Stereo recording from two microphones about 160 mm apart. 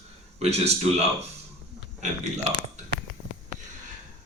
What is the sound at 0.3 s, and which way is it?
Speech, 40° right (ahead or behind).